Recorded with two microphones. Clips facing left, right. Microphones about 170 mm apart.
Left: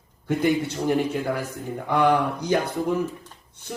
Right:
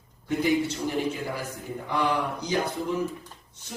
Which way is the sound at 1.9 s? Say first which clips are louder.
Left 6 dB; 55° left (ahead or behind).